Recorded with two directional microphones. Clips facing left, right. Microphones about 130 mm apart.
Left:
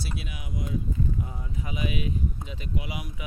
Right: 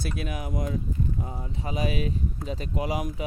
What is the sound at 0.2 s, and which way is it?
Speech, 45° right (ahead or behind).